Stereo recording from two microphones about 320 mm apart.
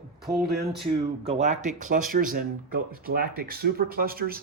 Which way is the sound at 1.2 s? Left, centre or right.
Centre.